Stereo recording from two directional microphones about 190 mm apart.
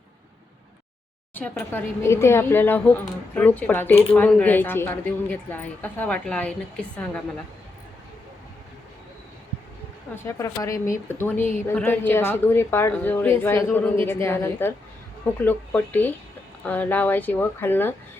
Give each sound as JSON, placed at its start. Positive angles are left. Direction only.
{"t": 1.3, "sound": "speech", "side_deg": 10}
{"t": 10.2, "sound": "speech", "side_deg": 15}